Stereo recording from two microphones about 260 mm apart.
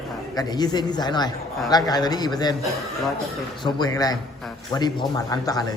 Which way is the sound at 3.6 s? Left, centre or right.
Centre.